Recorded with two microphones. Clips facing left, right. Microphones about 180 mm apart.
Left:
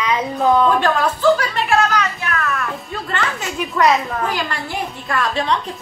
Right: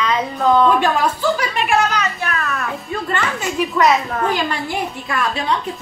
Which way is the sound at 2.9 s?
5° right (ahead or behind).